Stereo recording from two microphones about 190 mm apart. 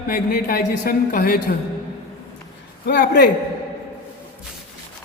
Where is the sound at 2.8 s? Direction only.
60° left (ahead or behind).